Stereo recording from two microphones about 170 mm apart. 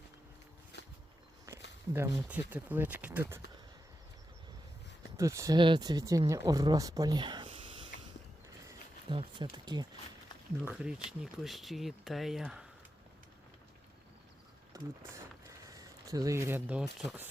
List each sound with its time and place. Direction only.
1.5 s a sound: 15° right (ahead or behind)
1.9 s speech: 10° right (ahead or behind)
5.1 s speech: 15° right (ahead or behind)
5.5 s speech: 30° right (ahead or behind)
10.7 s speech: 5° right (ahead or behind)
14.7 s speech: 20° right (ahead or behind); by 17.2 s 5° right (ahead or behind)